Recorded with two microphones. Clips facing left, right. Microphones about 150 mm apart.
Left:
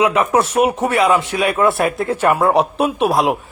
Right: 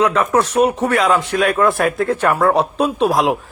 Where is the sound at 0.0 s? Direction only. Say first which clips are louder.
Even; 10° left (ahead or behind).